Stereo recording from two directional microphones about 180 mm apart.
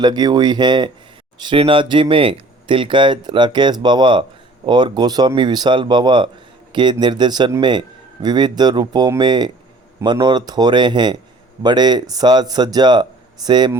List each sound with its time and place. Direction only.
0.0 s speech: 25° right (ahead or behind)